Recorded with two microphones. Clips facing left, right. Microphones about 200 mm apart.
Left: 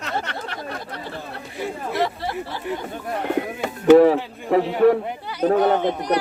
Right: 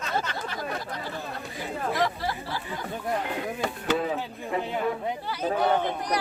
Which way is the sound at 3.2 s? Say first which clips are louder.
Left 8 dB; 60° left (ahead or behind).